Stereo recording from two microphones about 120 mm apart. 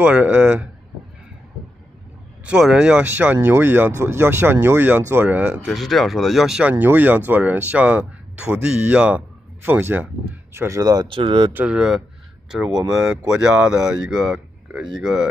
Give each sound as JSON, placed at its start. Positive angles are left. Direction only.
{"t": 0.0, "sound": "speech", "side_deg": -15}
{"t": 2.4, "sound": "speech", "side_deg": -5}
{"t": 5.7, "sound": "speech", "side_deg": 0}
{"t": 11.1, "sound": "speech", "side_deg": -50}
{"t": 11.5, "sound": "speech", "side_deg": -10}